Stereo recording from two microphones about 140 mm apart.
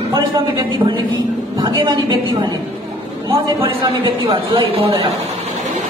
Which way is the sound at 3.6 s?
35° right (ahead or behind).